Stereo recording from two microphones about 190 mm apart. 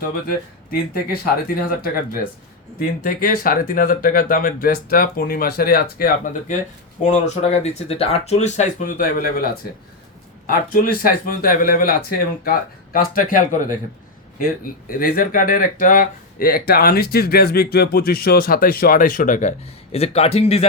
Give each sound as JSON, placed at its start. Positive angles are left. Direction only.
{"t": 0.7, "sound": "speech", "side_deg": 55}
{"t": 7.0, "sound": "speech", "side_deg": 40}